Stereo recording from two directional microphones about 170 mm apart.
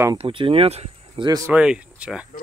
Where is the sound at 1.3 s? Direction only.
20° right (ahead or behind).